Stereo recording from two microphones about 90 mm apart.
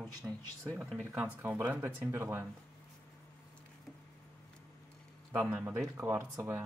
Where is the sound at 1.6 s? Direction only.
25° right (ahead or behind).